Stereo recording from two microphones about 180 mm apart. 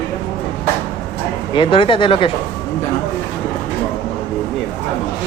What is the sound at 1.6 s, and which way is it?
Speech, 30° left (ahead or behind).